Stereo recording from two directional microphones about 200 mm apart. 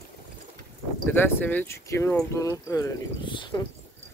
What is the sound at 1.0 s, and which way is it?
Speech, 10° left (ahead or behind).